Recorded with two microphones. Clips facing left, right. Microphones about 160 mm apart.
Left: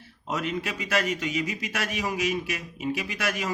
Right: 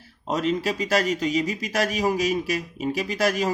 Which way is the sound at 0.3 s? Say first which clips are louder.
Right 6 dB; 35° right (ahead or behind).